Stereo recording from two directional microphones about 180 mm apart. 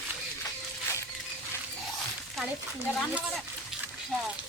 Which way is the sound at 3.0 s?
Centre (ahead or behind).